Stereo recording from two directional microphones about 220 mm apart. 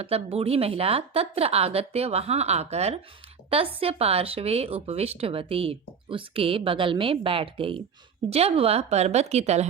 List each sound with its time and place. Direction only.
0.0 s speech: 25° right (ahead or behind)